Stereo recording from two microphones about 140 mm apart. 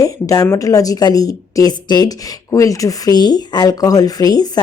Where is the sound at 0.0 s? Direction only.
25° left (ahead or behind).